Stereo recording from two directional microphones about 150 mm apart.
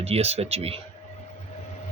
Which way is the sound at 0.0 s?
45° right (ahead or behind).